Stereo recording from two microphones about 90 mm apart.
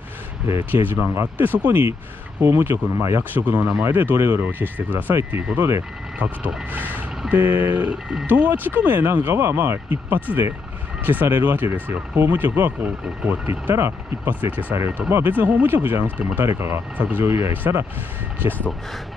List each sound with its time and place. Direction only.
0.7 s speech: 20° right (ahead or behind)
7.9 s speech: centre (ahead or behind)
8.3 s speech: 20° right (ahead or behind)
16.3 s speech: 30° right (ahead or behind)
17.5 s speech: 25° right (ahead or behind)